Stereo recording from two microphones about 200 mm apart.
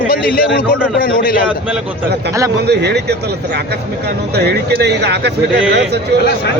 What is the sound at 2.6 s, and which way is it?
Speech, 55° right (ahead or behind).